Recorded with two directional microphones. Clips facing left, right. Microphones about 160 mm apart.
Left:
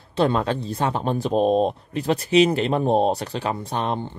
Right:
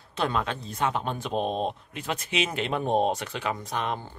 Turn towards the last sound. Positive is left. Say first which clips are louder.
# left 5 dB
turn(degrees=35)  # may be behind; listen again after turning